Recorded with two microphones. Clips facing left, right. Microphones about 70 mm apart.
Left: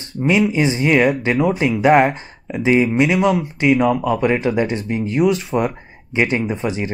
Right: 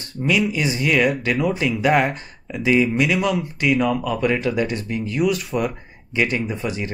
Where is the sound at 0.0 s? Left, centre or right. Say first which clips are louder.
Left 4 dB; left.